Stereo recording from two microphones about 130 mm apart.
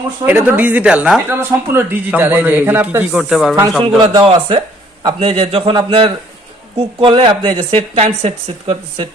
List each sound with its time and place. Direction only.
0.3 s a man's voice: 15° right (ahead or behind)
4.0 s speech: 35° right (ahead or behind)
4.3 s a man's voice: 45° right (ahead or behind)